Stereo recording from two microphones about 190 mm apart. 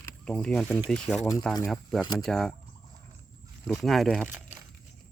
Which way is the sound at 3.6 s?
Centre (ahead or behind).